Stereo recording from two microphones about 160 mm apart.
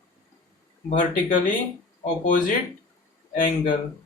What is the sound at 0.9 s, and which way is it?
Speech, 55° left (ahead or behind).